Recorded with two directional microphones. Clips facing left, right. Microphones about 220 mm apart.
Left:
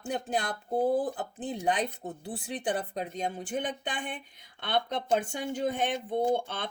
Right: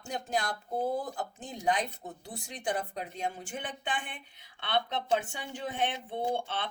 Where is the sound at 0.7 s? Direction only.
15° left (ahead or behind).